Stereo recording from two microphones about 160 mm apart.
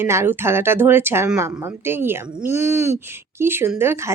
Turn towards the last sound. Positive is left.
turn(degrees=-15)  # may be behind; listen again after turning